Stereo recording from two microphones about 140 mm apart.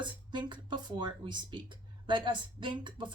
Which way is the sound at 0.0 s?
35° right (ahead or behind).